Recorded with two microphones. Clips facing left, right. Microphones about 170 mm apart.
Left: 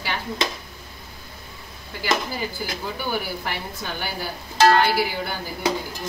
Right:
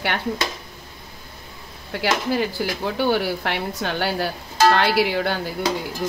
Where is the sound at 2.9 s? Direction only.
70° right (ahead or behind).